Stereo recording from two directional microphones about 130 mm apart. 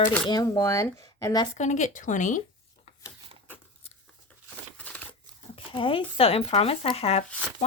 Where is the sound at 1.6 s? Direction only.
70° left (ahead or behind).